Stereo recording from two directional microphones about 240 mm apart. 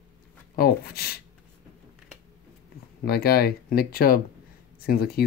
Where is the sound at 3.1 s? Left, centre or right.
Left.